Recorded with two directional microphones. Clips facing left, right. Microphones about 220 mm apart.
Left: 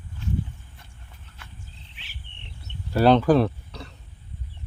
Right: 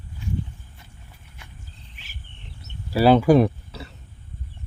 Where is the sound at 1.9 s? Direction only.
45° right (ahead or behind).